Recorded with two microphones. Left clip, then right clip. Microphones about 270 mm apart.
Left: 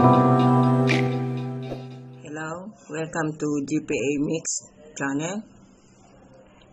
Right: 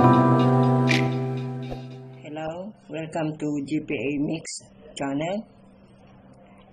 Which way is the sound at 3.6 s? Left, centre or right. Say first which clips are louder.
Left 2 dB; centre.